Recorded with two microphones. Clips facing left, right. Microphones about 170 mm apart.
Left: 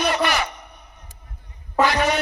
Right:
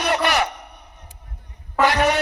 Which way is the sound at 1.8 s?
70° right (ahead or behind).